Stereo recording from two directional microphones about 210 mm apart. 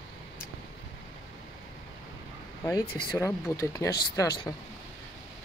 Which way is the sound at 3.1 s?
10° left (ahead or behind).